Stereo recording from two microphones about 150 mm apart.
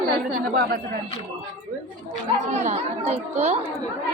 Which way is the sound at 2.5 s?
50° right (ahead or behind).